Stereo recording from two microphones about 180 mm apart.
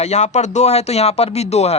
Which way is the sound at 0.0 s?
40° left (ahead or behind).